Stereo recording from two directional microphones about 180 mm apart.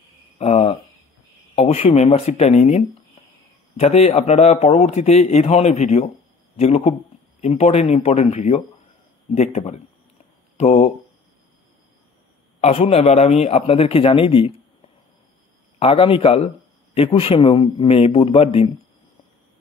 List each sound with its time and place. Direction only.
0.4 s a sound: 35° left (ahead or behind)
1.5 s a man's voice: 35° left (ahead or behind)
12.5 s a man's voice: 35° left (ahead or behind)
15.8 s a man's voice: 30° left (ahead or behind)